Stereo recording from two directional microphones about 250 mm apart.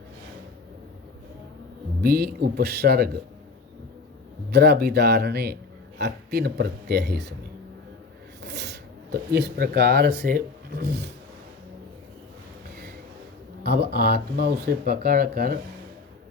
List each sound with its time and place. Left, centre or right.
2.0 s speech: right
4.5 s speech: right
8.4 s speech: right
13.7 s speech: right